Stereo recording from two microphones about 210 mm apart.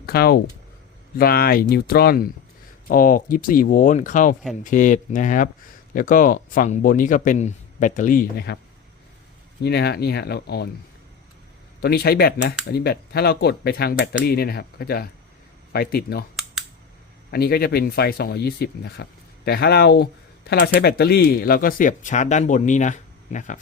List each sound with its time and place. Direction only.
0.0 s speech: 50° left (ahead or behind)
9.6 s speech: 50° left (ahead or behind)
11.8 s speech: 50° left (ahead or behind)
16.3 s computer keyboard: centre (ahead or behind)
17.3 s speech: 45° left (ahead or behind)